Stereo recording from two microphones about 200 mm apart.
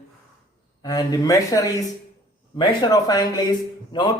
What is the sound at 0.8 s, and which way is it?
A man's voice, 20° left (ahead or behind).